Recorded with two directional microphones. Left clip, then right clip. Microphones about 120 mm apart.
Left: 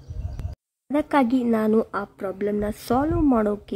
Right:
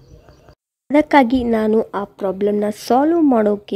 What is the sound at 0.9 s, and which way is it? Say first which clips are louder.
A woman's voice: right 8 dB; 30° right (ahead or behind).